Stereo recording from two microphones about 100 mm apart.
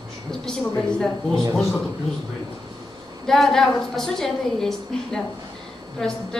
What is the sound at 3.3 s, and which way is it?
A woman's voice, 5° left (ahead or behind).